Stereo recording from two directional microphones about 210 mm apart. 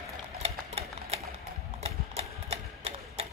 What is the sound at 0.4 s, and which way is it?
Sewing machine, 30° right (ahead or behind).